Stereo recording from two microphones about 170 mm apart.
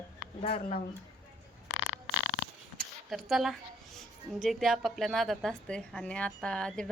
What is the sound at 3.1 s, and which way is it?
A woman's voice, centre (ahead or behind).